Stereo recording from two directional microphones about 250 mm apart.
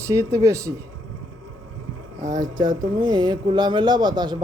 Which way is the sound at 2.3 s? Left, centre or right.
Centre.